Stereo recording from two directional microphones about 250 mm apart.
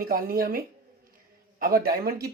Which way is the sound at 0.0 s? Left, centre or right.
Right.